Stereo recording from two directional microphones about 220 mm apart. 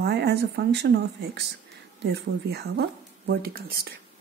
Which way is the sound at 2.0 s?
50° right (ahead or behind).